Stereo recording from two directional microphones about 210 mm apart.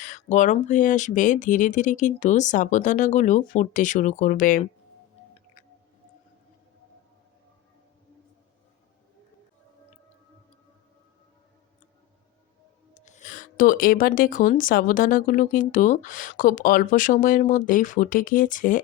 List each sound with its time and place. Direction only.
0.0 s speech: 35° left (ahead or behind)
12.9 s a sound: 35° left (ahead or behind)
14.1 s speech: 40° left (ahead or behind)